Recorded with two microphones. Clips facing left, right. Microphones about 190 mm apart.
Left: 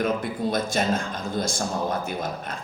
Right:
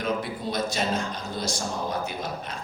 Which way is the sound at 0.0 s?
50° left (ahead or behind).